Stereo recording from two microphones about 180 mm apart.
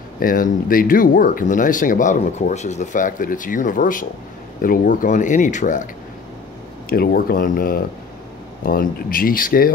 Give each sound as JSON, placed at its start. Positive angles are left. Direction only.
{"t": 0.2, "sound": "speech", "side_deg": 50}
{"t": 6.9, "sound": "speech", "side_deg": 55}